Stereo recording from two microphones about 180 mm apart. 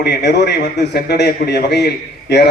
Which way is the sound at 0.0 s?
65° left (ahead or behind).